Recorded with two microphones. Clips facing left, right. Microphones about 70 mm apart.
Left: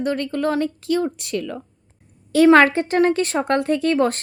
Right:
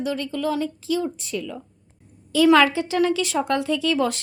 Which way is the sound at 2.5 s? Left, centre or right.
Left.